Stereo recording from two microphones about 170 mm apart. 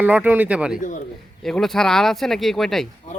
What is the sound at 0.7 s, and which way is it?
Speech, 50° left (ahead or behind).